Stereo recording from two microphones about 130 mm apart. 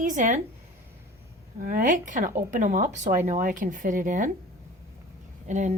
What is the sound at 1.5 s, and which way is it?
Speech, 90° right.